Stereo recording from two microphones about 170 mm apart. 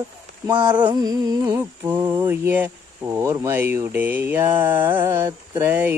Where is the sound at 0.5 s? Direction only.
25° right (ahead or behind).